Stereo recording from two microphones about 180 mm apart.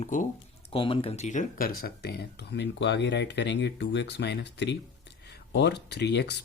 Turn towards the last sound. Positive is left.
turn(degrees=65)  # may be behind; listen again after turning